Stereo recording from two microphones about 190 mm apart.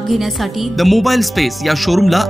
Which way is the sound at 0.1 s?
Centre (ahead or behind).